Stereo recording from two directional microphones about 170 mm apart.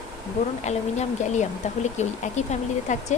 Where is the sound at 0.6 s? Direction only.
45° left (ahead or behind).